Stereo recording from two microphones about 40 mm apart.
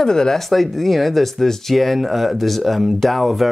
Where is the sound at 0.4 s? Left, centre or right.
Centre.